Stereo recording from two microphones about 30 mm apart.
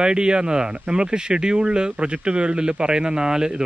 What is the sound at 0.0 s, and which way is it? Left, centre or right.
Speech, right.